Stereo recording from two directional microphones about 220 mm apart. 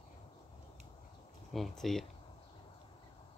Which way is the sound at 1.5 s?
Centre (ahead or behind).